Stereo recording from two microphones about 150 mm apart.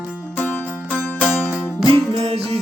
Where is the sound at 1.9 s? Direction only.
40° right (ahead or behind).